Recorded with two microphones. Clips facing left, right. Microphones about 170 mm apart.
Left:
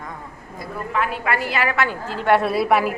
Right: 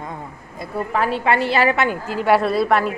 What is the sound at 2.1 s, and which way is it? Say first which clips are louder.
Speech: right 1 dB; 5° right (ahead or behind).